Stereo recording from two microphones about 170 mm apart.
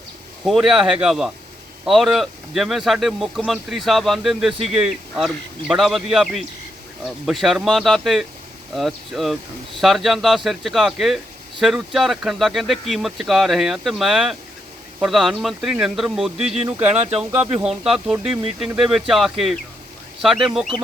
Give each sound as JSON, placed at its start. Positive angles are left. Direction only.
{"t": 0.4, "sound": "speech", "side_deg": 0}
{"t": 16.8, "sound": "speech", "side_deg": -40}
{"t": 17.3, "sound": "speech", "side_deg": -5}